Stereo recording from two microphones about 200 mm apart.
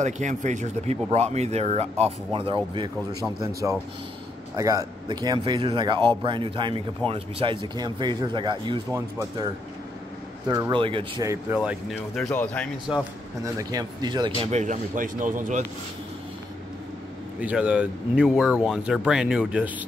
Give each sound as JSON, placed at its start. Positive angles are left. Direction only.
{"t": 0.0, "sound": "speech", "side_deg": -35}
{"t": 10.5, "sound": "speech", "side_deg": -20}
{"t": 11.5, "sound": "speech", "side_deg": -5}
{"t": 13.4, "sound": "speech", "side_deg": -15}
{"t": 14.4, "sound": "speech", "side_deg": -35}
{"t": 17.4, "sound": "speech", "side_deg": -5}